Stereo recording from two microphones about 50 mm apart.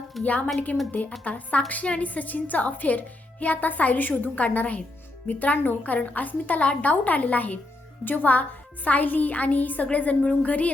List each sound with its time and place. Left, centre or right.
0.2 s a woman's voice: left